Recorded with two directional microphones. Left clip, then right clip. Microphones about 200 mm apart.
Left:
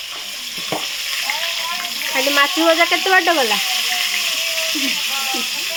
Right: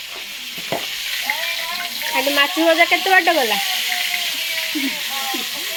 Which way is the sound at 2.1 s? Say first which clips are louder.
Left 1 dB; 10° left (ahead or behind).